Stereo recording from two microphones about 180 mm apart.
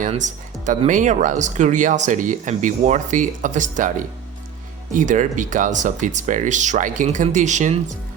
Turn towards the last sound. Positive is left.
turn(degrees=-40)  # may be behind; listen again after turning